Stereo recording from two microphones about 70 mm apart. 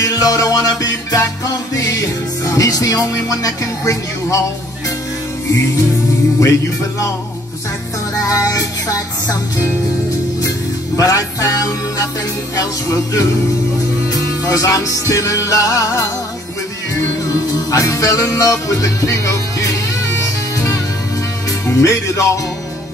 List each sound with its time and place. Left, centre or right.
0.0 s music: left
5.5 s music: left
8.4 s music: left
11.0 s music: left
14.4 s music: left
17.3 s music: left